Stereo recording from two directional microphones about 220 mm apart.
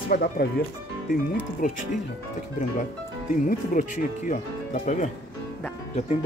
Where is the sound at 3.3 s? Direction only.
35° left (ahead or behind).